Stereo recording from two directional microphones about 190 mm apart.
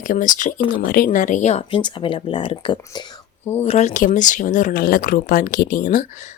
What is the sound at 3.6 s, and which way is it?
Speech, 35° left (ahead or behind).